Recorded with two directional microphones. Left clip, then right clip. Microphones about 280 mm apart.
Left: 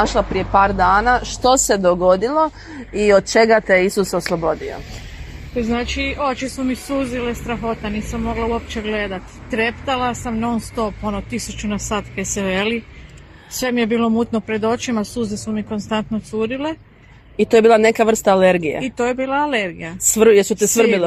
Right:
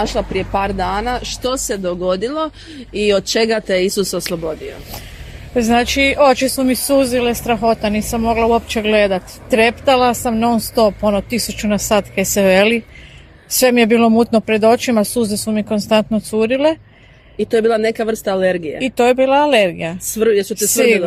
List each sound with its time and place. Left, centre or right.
0.0 s speech: centre
3.1 s speech: right
5.5 s speech: right
17.5 s speech: centre
18.9 s speech: right
20.1 s speech: centre